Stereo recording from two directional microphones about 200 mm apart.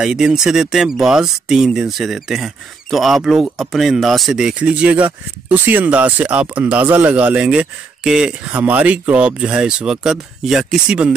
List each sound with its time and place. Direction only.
0.0 s speech: 5° right (ahead or behind)